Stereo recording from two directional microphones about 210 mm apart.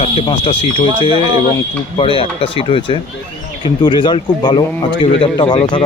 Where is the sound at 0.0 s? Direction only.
25° left (ahead or behind).